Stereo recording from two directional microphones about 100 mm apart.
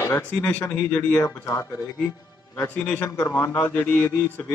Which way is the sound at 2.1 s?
40° left (ahead or behind).